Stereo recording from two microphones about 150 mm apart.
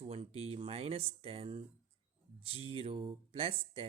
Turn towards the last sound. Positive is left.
turn(degrees=-40)  # may be behind; listen again after turning